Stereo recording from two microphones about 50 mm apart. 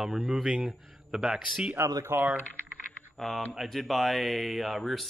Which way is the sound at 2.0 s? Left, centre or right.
Right.